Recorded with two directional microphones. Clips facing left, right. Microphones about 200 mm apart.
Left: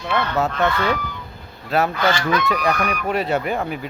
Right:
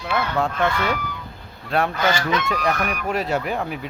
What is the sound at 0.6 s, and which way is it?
Speech, 10° right (ahead or behind).